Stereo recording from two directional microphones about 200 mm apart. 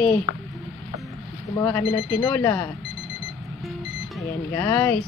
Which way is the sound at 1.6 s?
10° left (ahead or behind).